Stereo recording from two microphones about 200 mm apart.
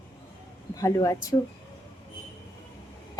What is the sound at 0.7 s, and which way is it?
Speech, 15° left (ahead or behind).